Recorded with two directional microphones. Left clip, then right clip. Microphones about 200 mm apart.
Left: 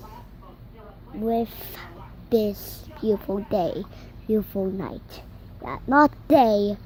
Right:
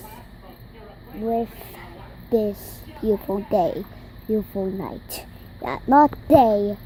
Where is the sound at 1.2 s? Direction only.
35° left (ahead or behind).